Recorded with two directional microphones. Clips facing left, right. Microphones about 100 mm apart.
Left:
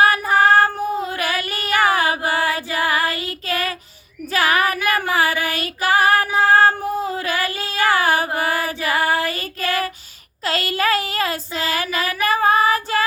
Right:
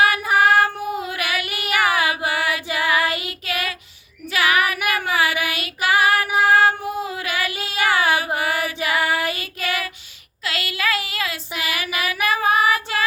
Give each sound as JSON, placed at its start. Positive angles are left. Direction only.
{"t": 0.0, "sound": "child singing", "side_deg": 35}
{"t": 1.6, "sound": "a sound", "side_deg": 35}
{"t": 2.7, "sound": "child singing", "side_deg": 40}
{"t": 3.1, "sound": "child singing", "side_deg": -20}
{"t": 3.4, "sound": "child singing", "side_deg": 40}
{"t": 6.4, "sound": "female singing", "side_deg": 40}
{"t": 8.4, "sound": "music", "side_deg": 40}
{"t": 9.3, "sound": "child singing", "side_deg": 40}